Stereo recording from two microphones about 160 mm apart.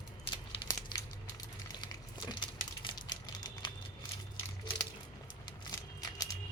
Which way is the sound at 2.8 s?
30° left (ahead or behind).